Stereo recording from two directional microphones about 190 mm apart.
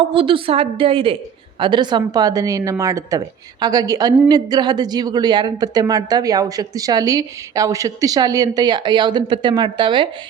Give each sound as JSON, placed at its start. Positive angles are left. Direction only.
{"t": 0.1, "sound": "a woman's voice", "side_deg": -30}